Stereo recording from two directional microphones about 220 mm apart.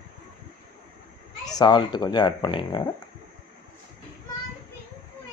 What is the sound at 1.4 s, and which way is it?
Speech, 20° left (ahead or behind).